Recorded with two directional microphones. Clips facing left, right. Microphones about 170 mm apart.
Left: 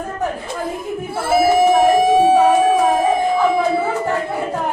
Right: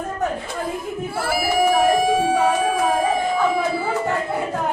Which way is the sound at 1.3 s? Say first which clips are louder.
Left 6 dB; 25° left (ahead or behind).